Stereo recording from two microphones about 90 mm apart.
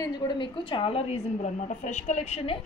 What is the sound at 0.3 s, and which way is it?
Speech, 65° left (ahead or behind).